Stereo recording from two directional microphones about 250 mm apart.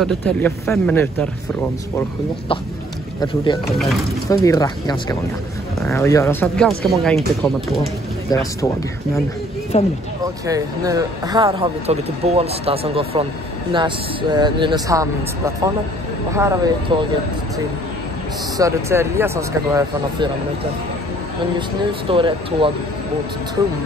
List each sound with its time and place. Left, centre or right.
0.0 s speech: centre
3.2 s speech: centre
3.7 s speech: centre
4.3 s speech: centre
9.7 s speech: left
10.4 s a man's voice: centre
18.6 s a man's voice: centre
22.1 s speech: centre